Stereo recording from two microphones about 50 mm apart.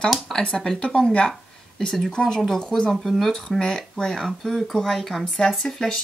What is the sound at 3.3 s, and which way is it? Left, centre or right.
Speech, centre.